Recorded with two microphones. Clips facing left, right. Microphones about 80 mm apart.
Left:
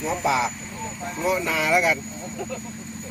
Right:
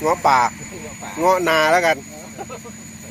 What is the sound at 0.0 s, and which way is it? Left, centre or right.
Speech, right.